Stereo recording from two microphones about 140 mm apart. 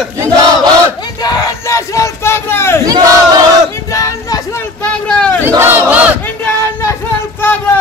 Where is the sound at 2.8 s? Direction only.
30° right (ahead or behind).